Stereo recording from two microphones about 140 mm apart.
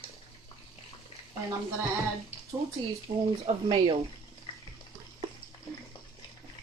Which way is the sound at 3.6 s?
40° right (ahead or behind).